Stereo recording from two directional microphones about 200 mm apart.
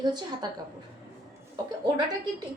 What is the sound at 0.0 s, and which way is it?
Speech, 20° right (ahead or behind).